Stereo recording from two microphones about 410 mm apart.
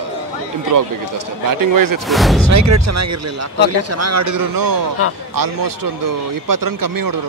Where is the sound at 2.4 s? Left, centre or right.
Right.